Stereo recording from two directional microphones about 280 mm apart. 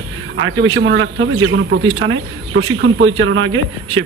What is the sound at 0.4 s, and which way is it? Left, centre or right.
A man's voice, right.